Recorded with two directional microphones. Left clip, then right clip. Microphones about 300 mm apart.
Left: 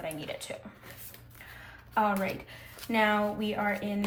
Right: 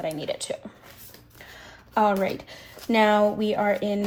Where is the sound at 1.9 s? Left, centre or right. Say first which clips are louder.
Right 6 dB; centre.